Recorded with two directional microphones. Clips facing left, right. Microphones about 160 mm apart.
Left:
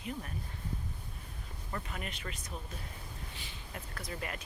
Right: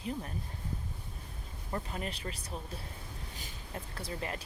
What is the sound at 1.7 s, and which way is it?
Speech, 30° right (ahead or behind).